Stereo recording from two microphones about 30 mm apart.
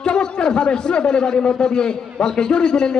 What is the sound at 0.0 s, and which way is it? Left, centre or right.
A man's voice, left.